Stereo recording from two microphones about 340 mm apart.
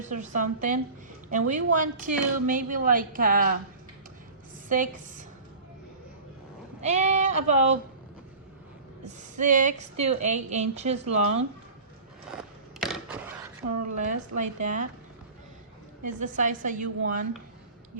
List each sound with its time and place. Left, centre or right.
0.0 s a woman's voice: right
4.7 s a woman's voice: right
6.8 s a woman's voice: centre
9.0 s a woman's voice: right
12.8 s skateboard: centre
13.9 s a woman's voice: right
16.0 s a woman's voice: right